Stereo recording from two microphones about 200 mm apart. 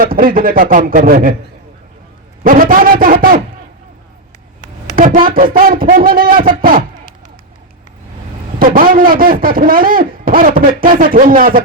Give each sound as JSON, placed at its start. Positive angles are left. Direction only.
{"t": 0.0, "sound": "a man's voice", "side_deg": -45}
{"t": 2.4, "sound": "a man's voice", "side_deg": -45}
{"t": 4.9, "sound": "a man's voice", "side_deg": -45}
{"t": 8.5, "sound": "a man's voice", "side_deg": -45}